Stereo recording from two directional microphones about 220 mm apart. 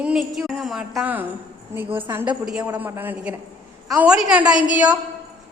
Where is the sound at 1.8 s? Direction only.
25° right (ahead or behind).